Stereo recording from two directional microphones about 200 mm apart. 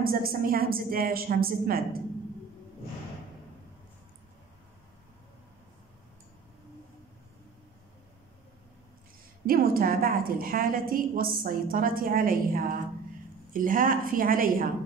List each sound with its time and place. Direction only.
0.0 s a woman's voice: 45° right (ahead or behind)
9.5 s a woman's voice: 45° right (ahead or behind)